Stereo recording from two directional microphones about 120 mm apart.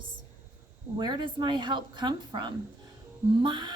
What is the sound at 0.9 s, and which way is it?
A woman's voice, 35° right (ahead or behind).